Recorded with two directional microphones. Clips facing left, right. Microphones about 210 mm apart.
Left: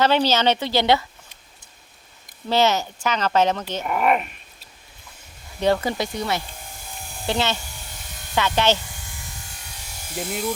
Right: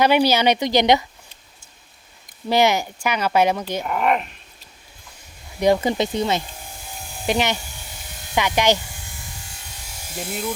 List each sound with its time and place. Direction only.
0.0 s speech: 10° right (ahead or behind)
2.5 s speech: 15° right (ahead or behind)
3.8 s speech: 5° left (ahead or behind)
5.5 s speech: 15° right (ahead or behind)
10.2 s speech: centre (ahead or behind)